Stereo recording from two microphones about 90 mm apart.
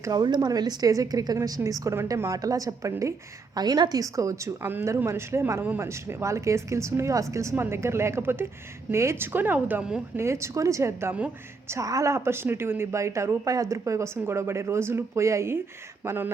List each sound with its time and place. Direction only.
0.0 s a woman's voice: 50° right (ahead or behind)
3.6 s a woman's voice: 50° right (ahead or behind); by 9.8 s 20° right (ahead or behind)
10.2 s a woman's voice: 30° right (ahead or behind)